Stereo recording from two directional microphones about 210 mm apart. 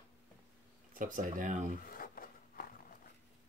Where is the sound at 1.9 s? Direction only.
45° left (ahead or behind).